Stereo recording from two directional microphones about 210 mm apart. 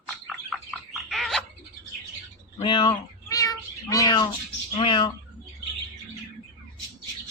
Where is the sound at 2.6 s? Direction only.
25° left (ahead or behind).